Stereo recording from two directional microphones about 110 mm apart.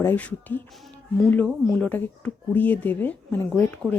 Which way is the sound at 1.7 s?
10° left (ahead or behind).